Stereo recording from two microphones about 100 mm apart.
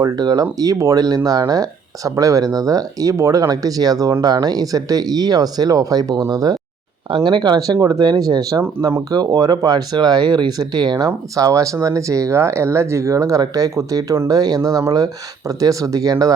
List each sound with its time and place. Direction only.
0.0 s speech: 40° right (ahead or behind)
7.3 s speech: 45° right (ahead or behind)